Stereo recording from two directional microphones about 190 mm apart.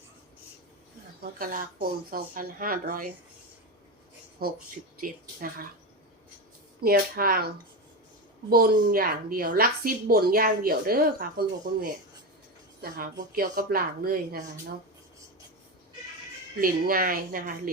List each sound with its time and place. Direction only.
1.2 s a woman's voice: 50° right (ahead or behind)
4.4 s a woman's voice: 55° right (ahead or behind)
6.8 s a woman's voice: 50° right (ahead or behind)
16.6 s a woman's voice: 50° right (ahead or behind)